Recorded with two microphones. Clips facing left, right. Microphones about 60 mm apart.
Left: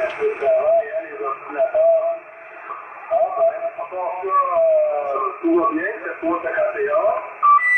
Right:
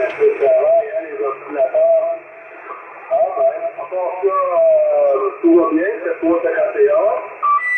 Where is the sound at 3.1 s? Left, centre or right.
Centre.